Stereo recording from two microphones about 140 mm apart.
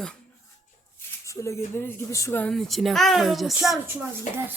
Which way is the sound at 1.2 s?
20° left (ahead or behind).